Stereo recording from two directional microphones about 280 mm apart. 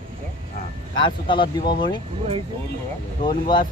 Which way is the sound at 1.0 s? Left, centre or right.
Centre.